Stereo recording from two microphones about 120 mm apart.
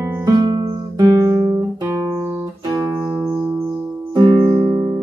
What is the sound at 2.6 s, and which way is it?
Music, 25° right (ahead or behind).